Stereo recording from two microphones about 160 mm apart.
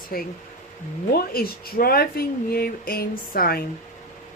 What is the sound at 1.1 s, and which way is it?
Speech, 70° left (ahead or behind).